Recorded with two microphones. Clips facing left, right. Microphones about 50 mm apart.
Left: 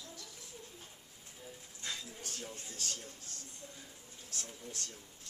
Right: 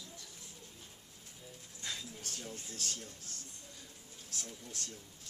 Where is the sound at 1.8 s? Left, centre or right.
Centre.